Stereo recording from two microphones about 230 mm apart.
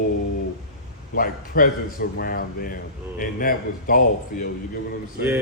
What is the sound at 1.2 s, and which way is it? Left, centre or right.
Speech, left.